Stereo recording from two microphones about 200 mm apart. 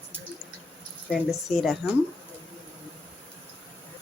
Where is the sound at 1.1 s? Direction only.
Centre (ahead or behind).